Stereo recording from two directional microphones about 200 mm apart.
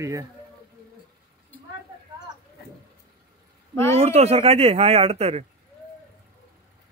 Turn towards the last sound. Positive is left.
turn(degrees=-30)  # may be behind; listen again after turning